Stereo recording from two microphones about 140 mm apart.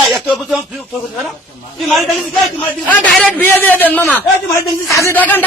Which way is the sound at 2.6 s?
10° left (ahead or behind).